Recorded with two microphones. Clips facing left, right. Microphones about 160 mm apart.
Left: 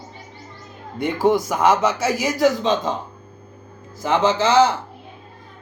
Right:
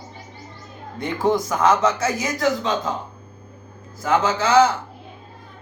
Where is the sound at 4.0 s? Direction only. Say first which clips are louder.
Left 2 dB; 20° left (ahead or behind).